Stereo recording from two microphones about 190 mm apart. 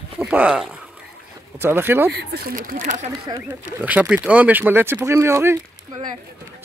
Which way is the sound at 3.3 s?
10° right (ahead or behind).